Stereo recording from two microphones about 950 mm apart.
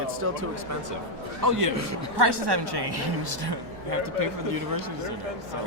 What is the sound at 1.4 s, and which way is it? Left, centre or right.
A woman's voice, centre.